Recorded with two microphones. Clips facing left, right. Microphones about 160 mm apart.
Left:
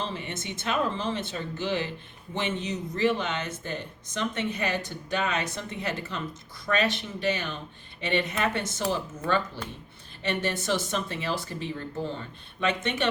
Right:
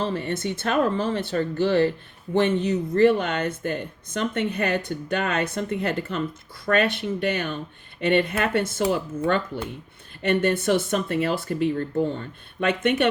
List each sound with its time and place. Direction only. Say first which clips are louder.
0.0 s speech: right 8 dB; 55° right (ahead or behind)